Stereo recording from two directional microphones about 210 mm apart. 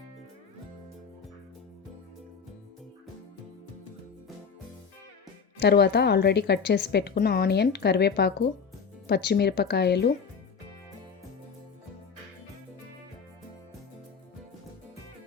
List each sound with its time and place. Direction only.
5.5 s a woman's voice: 50° left (ahead or behind)